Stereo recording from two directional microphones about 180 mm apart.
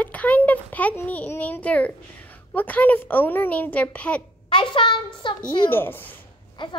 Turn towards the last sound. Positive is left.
turn(degrees=25)  # may be behind; listen again after turning